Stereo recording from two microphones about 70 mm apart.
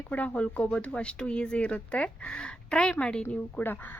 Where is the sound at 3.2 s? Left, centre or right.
Left.